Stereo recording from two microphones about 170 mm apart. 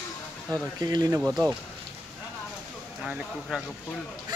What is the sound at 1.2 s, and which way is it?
Speech, 5° right (ahead or behind).